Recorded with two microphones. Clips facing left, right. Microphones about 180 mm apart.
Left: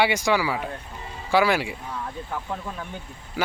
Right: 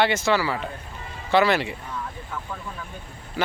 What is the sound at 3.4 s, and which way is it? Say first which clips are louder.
Speech: right 1 dB; 10° left (ahead or behind).